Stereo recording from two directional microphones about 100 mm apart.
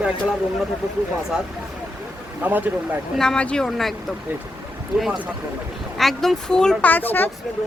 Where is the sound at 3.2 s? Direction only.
10° left (ahead or behind).